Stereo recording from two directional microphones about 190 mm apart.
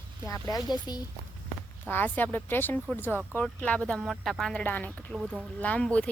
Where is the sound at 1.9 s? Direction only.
10° left (ahead or behind).